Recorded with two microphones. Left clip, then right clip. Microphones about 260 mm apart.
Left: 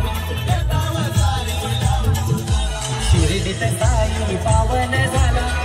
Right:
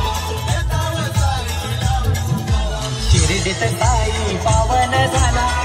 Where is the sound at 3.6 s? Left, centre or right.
Right.